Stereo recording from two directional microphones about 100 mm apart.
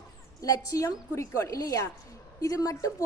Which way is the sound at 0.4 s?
35° left (ahead or behind).